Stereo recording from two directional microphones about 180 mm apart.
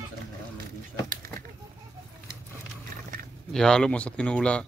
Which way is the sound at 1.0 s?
50° right (ahead or behind).